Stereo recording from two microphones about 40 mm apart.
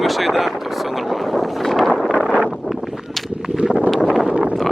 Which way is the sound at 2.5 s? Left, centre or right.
Centre.